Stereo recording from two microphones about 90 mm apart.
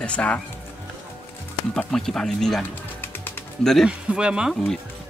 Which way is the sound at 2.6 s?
25° left (ahead or behind).